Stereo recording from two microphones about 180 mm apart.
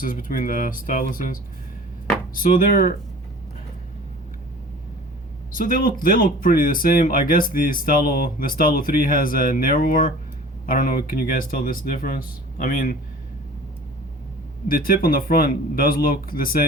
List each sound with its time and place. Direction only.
0.0 s speech: 50° left (ahead or behind)
5.5 s speech: 50° left (ahead or behind)
14.7 s speech: 55° left (ahead or behind)